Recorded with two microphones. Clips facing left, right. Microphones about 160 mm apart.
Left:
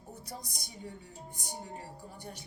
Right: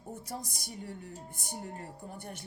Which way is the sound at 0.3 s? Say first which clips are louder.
Right 4 dB; 60° right (ahead or behind).